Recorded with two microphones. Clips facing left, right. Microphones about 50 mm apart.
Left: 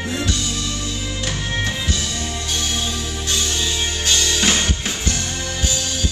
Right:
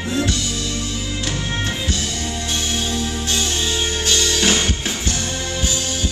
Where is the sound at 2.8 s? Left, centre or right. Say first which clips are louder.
Right 2 dB; right.